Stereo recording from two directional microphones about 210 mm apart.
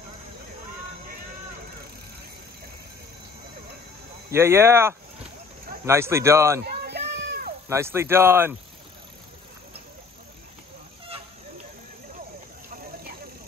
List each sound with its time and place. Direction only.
4.3 s speech: 10° right (ahead or behind)
6.6 s children playing: 50° right (ahead or behind)
7.6 s speech: 10° right (ahead or behind)